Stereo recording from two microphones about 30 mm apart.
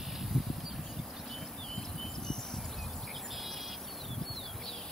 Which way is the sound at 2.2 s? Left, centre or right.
Centre.